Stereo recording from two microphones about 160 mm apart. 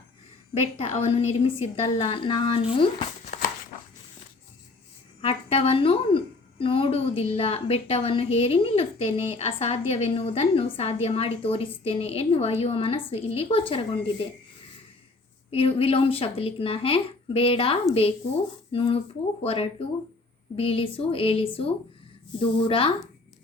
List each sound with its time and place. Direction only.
0.5 s a woman's voice: 40° left (ahead or behind)
5.2 s a woman's voice: 40° left (ahead or behind)
15.4 s a woman's voice: 35° left (ahead or behind)